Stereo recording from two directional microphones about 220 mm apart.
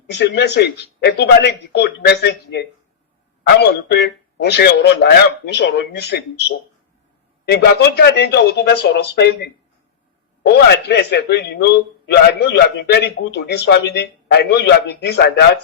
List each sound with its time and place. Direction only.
0.1 s a man's voice: 50° left (ahead or behind)
7.4 s a man's voice: 50° left (ahead or behind)